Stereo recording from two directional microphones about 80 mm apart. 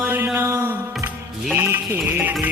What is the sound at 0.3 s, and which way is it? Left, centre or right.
Mantra, right.